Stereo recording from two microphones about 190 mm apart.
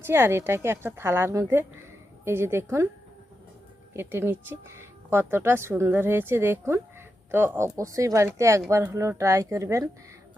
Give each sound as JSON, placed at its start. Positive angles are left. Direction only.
{"t": 0.0, "sound": "speech", "side_deg": -10}
{"t": 3.9, "sound": "speech", "side_deg": -10}